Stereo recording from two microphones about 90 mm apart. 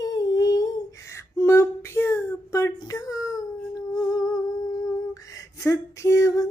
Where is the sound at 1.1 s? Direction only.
30° left (ahead or behind).